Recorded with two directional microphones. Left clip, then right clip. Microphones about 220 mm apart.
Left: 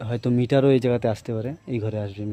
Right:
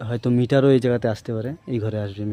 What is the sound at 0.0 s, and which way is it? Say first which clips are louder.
Speech: right 2 dB; 5° right (ahead or behind).